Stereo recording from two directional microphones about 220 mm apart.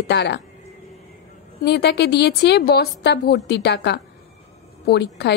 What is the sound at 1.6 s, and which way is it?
A woman's voice, 50° left (ahead or behind).